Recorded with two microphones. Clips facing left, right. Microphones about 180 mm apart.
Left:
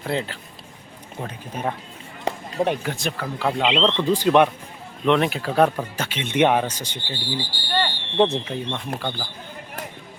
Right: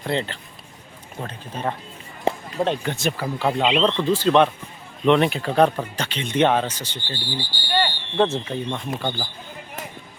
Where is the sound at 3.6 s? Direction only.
15° right (ahead or behind).